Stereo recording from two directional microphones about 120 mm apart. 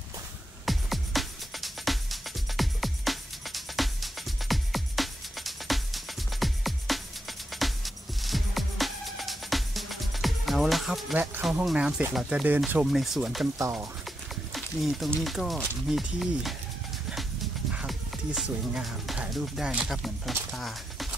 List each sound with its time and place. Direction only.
0.7 s music: centre (ahead or behind)
11.6 s speech: 10° right (ahead or behind)
13.6 s speech: 25° right (ahead or behind)
14.0 s a sound: centre (ahead or behind)
15.9 s speech: centre (ahead or behind)
17.7 s speech: 5° right (ahead or behind)